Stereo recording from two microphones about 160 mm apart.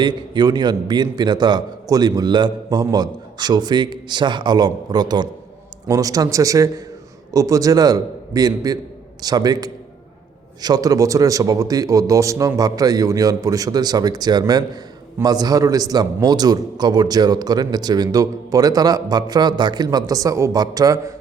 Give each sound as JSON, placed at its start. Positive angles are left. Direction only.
{"t": 0.0, "sound": "a man's voice", "side_deg": -25}